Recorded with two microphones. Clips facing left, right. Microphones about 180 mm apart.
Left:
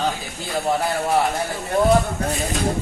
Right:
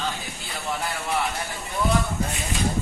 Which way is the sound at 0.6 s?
45° left (ahead or behind).